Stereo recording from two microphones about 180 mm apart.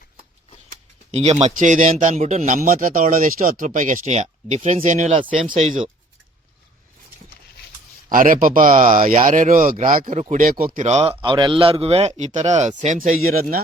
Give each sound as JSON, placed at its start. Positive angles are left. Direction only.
{"t": 1.1, "sound": "speech", "side_deg": -35}
{"t": 5.3, "sound": "speech", "side_deg": -30}
{"t": 5.5, "sound": "a man's voice", "side_deg": -40}
{"t": 8.1, "sound": "speech", "side_deg": -50}
{"t": 10.8, "sound": "a man's voice", "side_deg": -35}